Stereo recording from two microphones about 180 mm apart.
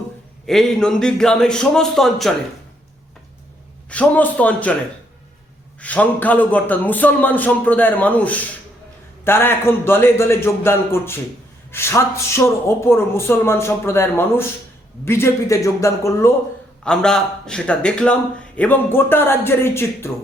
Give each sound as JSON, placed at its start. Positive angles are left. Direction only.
{"t": 0.4, "sound": "a man's voice", "side_deg": 0}
{"t": 3.8, "sound": "a man's voice", "side_deg": 5}
{"t": 5.8, "sound": "a man's voice", "side_deg": 10}
{"t": 16.8, "sound": "a man's voice", "side_deg": 5}